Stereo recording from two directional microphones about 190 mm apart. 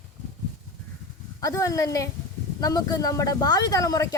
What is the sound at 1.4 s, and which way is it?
A woman's voice, 15° left (ahead or behind).